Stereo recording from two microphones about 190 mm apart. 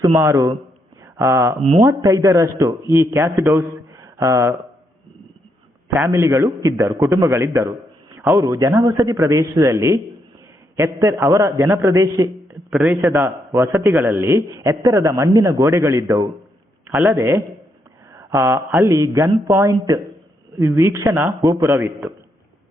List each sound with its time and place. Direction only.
0.2 s a man's voice: 15° right (ahead or behind)
5.9 s a man's voice: 15° right (ahead or behind)